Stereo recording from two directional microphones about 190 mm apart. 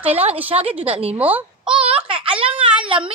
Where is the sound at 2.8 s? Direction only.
30° right (ahead or behind).